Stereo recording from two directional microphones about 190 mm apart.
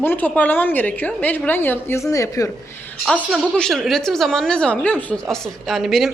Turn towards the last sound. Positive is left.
turn(degrees=0)  # may be behind; listen again after turning